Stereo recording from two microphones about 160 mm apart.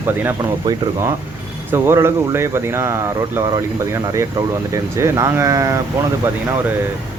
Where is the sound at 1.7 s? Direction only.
15° right (ahead or behind).